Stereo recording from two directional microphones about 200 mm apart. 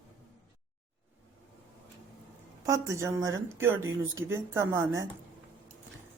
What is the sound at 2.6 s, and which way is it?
A woman's voice, 15° right (ahead or behind).